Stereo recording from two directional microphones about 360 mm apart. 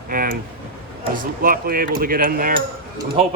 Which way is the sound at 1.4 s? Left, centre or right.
Right.